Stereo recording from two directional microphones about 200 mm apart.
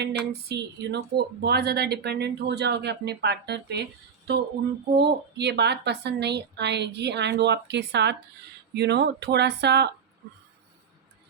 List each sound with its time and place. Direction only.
0.0 s speech: 55° right (ahead or behind)
4.9 s speech: 55° right (ahead or behind)